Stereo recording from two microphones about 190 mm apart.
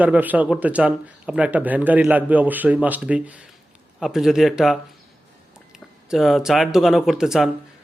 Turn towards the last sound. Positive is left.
turn(degrees=0)  # may be behind; listen again after turning